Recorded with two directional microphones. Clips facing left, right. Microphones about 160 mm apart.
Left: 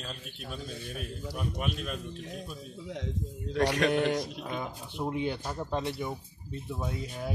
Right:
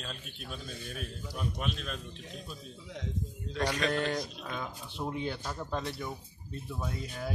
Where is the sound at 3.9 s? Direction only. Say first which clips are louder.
Left 4 dB; 10° left (ahead or behind).